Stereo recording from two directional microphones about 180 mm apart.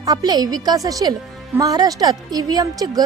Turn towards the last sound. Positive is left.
turn(degrees=-20)  # may be behind; listen again after turning